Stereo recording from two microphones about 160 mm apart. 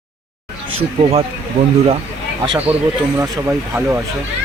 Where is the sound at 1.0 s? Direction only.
40° right (ahead or behind).